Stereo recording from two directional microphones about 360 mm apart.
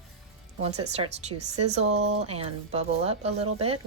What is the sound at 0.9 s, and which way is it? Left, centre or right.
Speech, centre.